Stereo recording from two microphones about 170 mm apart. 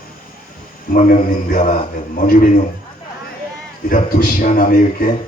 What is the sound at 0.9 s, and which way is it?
A man's voice, 50° left (ahead or behind).